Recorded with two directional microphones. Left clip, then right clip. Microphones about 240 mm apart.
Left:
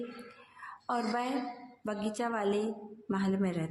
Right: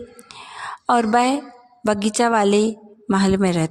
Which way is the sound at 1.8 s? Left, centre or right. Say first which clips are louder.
Right 16 dB; right.